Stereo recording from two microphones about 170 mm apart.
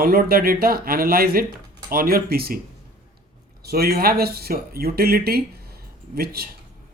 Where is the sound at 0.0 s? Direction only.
60° right (ahead or behind).